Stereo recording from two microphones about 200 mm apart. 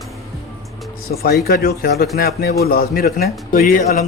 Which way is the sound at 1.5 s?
50° left (ahead or behind).